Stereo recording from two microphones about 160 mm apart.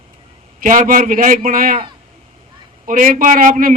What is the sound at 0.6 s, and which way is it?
A man's voice, 55° right (ahead or behind).